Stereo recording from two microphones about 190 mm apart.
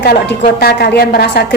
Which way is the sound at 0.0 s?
55° left (ahead or behind).